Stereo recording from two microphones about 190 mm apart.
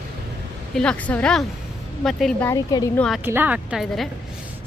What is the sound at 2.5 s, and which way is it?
Speech, 20° left (ahead or behind).